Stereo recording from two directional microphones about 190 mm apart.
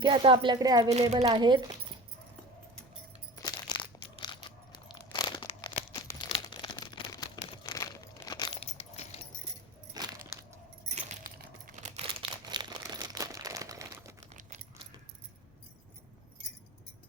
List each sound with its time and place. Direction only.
0.0 s a woman's voice: 25° right (ahead or behind)
3.4 s crumpling: 20° left (ahead or behind)
8.5 s keys jangling: 35° left (ahead or behind)
9.9 s a sound: 20° right (ahead or behind)
10.8 s crumpling: 40° right (ahead or behind); by 14.1 s 15° right (ahead or behind)